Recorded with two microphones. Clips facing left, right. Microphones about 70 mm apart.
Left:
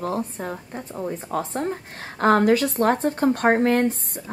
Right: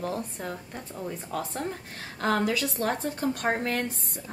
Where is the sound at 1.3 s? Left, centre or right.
Left.